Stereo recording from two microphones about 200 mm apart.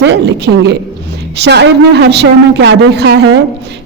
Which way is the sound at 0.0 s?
60° right (ahead or behind).